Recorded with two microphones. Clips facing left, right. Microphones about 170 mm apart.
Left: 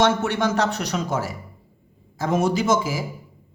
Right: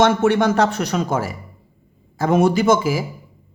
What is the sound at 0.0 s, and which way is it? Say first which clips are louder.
Speech: right 5 dB; 50° right (ahead or behind).